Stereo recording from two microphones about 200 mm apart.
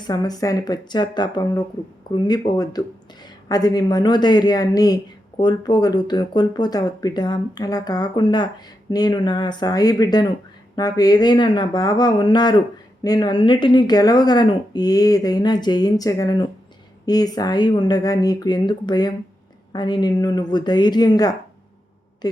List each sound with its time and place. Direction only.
0.0 s speech: 20° left (ahead or behind)